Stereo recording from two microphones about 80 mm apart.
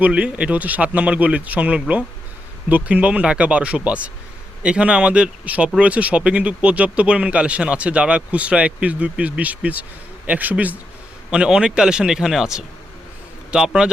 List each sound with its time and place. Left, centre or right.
0.0 s speech: centre